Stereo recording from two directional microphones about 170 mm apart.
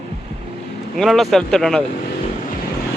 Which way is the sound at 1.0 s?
Centre (ahead or behind).